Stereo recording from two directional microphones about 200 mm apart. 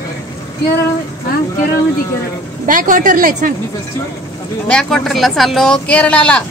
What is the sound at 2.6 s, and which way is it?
Speech, 40° right (ahead or behind).